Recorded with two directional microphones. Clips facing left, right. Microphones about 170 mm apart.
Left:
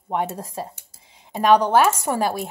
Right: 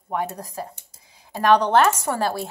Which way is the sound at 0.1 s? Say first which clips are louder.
Left 2 dB; 25° left (ahead or behind).